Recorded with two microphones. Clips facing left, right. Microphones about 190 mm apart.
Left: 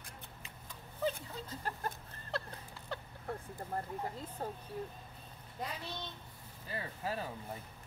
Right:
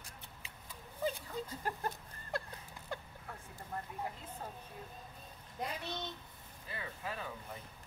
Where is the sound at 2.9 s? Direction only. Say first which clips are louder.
Even; 10° right (ahead or behind).